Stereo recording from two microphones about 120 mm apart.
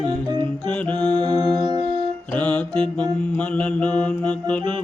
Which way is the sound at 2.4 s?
10° left (ahead or behind).